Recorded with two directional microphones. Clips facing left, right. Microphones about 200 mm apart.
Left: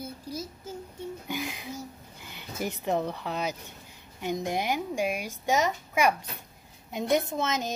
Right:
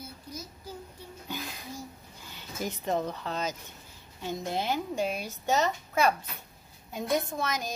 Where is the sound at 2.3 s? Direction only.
15° left (ahead or behind).